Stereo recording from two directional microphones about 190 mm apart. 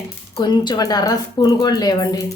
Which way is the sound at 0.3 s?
25° left (ahead or behind).